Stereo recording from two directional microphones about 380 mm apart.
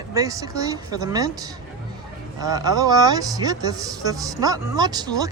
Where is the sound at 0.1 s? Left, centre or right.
Centre.